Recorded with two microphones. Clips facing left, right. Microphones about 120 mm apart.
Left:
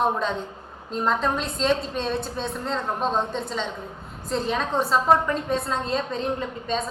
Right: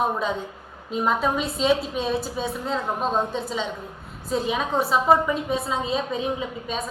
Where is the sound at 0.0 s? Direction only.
5° right (ahead or behind).